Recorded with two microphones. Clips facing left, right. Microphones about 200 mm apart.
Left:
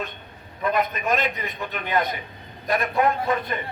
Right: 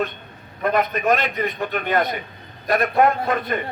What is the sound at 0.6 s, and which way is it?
A man's voice, 50° right (ahead or behind).